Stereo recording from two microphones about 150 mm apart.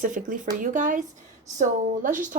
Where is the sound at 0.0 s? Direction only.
60° right (ahead or behind).